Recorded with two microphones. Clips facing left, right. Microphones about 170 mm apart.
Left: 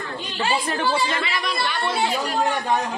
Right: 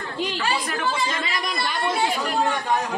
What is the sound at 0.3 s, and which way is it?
Speech, 30° left (ahead or behind).